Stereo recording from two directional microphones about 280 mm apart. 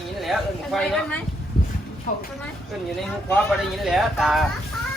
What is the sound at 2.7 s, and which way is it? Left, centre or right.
Speech, centre.